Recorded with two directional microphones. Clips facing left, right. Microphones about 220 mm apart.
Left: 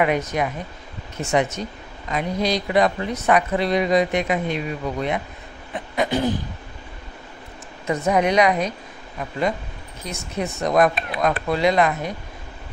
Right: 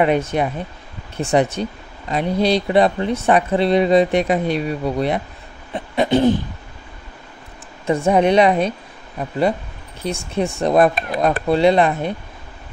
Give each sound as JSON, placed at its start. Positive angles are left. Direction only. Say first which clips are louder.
{"t": 0.0, "sound": "speech", "louder": "right 4 dB", "side_deg": -30}
{"t": 5.9, "sound": "a sound", "louder": "right 6 dB", "side_deg": -25}
{"t": 7.8, "sound": "a woman's voice", "louder": "right 4 dB", "side_deg": -30}
{"t": 11.0, "sound": "speech", "louder": "right 4 dB", "side_deg": -45}
{"t": 11.4, "sound": "a woman's voice", "louder": "right 5 dB", "side_deg": -30}